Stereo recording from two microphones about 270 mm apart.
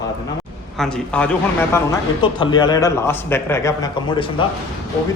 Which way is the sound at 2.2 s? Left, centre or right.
Centre.